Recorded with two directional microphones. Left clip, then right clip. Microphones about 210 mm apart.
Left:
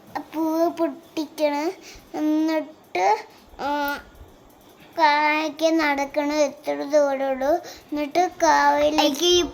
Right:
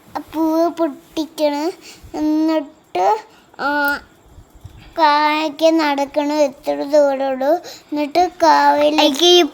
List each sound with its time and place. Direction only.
0.1 s a child's voice: 25° right (ahead or behind)